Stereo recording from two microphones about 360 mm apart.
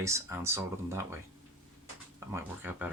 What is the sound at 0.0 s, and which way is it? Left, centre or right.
Speech, centre.